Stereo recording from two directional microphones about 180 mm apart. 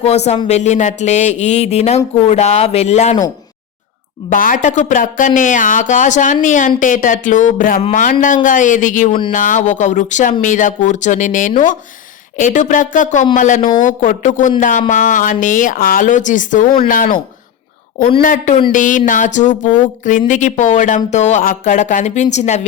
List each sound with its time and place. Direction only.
0.3 s speech: 35° left (ahead or behind)
4.3 s speech: 45° left (ahead or behind)
18.2 s speech: 50° left (ahead or behind)